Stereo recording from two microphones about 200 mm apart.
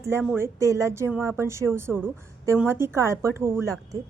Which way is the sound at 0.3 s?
15° right (ahead or behind).